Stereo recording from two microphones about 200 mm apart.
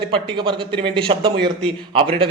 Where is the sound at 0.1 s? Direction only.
25° right (ahead or behind).